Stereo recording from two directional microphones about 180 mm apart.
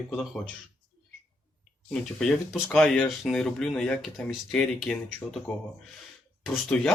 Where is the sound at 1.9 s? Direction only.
5° left (ahead or behind).